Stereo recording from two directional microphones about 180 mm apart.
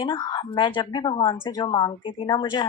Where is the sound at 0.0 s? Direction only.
25° left (ahead or behind).